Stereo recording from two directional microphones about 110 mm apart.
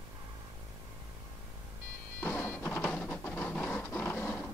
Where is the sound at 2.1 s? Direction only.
15° left (ahead or behind).